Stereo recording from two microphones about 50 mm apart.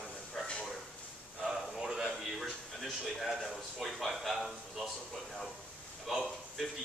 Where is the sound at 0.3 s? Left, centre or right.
Centre.